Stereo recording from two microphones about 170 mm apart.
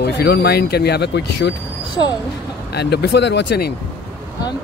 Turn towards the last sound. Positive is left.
turn(degrees=75)  # may be behind; listen again after turning